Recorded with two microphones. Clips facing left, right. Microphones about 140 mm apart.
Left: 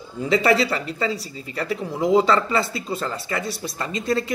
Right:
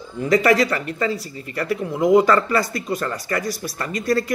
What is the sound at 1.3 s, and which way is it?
Speech, 55° right (ahead or behind).